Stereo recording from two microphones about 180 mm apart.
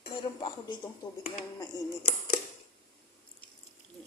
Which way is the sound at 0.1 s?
25° left (ahead or behind).